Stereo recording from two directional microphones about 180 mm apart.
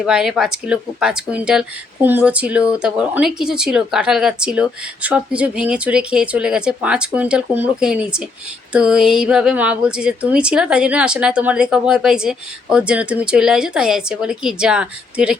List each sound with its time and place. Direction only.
0.0 s speech: 5° right (ahead or behind)